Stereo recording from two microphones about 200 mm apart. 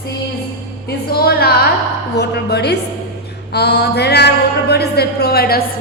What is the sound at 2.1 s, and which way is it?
Speech, 55° left (ahead or behind).